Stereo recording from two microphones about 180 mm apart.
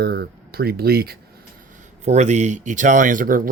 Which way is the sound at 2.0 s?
40° right (ahead or behind).